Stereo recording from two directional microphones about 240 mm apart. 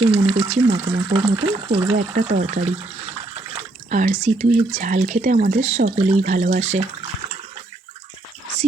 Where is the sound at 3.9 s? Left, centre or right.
Right.